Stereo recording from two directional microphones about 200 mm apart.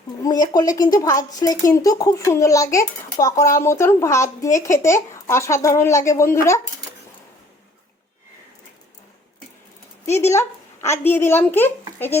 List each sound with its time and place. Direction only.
0.2 s a woman's voice: 20° left (ahead or behind)
10.1 s speech: 15° left (ahead or behind)